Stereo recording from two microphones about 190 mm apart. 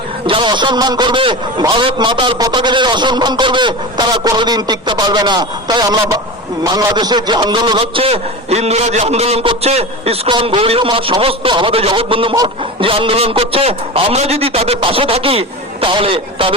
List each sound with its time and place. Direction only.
0.3 s a man's voice: 25° right (ahead or behind)